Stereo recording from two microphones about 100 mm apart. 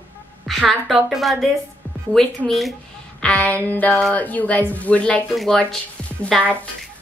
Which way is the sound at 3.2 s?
10° left (ahead or behind).